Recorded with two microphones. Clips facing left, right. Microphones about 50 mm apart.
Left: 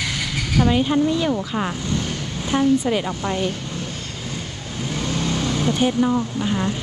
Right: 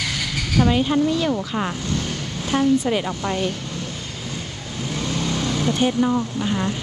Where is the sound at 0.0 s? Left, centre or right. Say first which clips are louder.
Even; centre.